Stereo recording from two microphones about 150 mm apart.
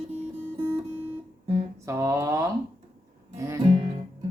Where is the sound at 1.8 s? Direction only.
20° right (ahead or behind).